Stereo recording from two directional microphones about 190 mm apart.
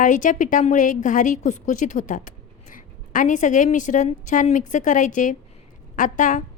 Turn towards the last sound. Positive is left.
turn(degrees=40)  # may be behind; listen again after turning